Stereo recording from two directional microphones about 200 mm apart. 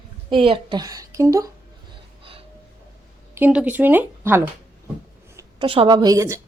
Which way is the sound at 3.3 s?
10° right (ahead or behind).